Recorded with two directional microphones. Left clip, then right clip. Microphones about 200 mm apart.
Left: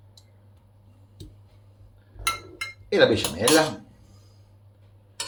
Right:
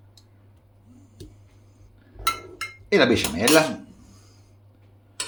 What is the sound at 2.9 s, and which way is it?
Speech, 50° right (ahead or behind).